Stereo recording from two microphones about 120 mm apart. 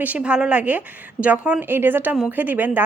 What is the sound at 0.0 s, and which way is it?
A woman's voice, 10° right (ahead or behind).